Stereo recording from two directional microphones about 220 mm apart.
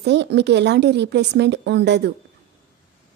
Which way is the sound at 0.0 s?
50° right (ahead or behind).